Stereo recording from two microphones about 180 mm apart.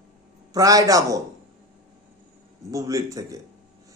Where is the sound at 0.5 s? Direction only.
20° right (ahead or behind).